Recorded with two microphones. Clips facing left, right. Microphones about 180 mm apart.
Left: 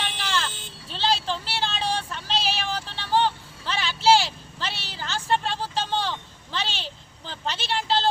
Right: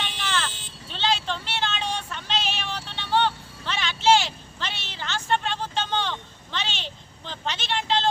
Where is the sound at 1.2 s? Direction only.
5° left (ahead or behind).